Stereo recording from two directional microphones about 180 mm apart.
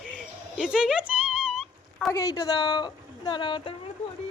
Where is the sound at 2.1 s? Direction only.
15° left (ahead or behind).